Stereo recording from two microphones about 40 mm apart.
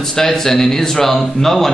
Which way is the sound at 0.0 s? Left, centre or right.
Centre.